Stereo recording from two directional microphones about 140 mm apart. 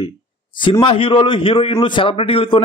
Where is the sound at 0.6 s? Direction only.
35° left (ahead or behind).